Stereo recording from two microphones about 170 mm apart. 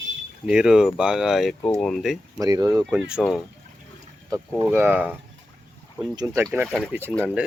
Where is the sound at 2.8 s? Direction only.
5° right (ahead or behind).